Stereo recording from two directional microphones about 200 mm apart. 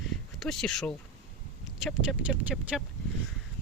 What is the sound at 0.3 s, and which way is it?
Speech, centre (ahead or behind).